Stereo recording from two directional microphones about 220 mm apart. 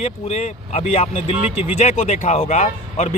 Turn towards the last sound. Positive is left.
turn(degrees=30)  # may be behind; listen again after turning